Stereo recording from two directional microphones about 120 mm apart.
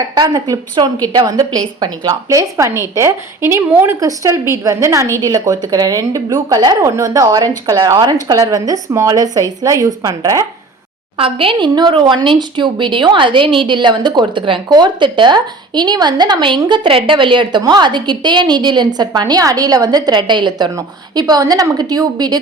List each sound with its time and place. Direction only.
0.1 s a woman's voice: 35° right (ahead or behind)
11.2 s a woman's voice: 50° right (ahead or behind)